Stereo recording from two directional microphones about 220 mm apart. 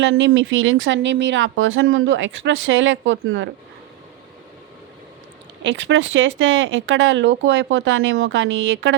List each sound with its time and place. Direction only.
0.0 s speech: 60° right (ahead or behind)
5.6 s speech: 55° right (ahead or behind)